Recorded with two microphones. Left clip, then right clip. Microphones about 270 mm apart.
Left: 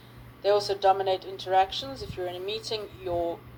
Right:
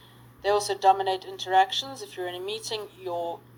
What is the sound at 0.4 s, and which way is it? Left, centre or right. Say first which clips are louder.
Speech: right 1 dB; right.